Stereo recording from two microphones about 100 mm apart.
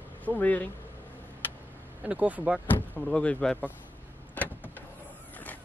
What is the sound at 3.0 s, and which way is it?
Speech, 10° left (ahead or behind).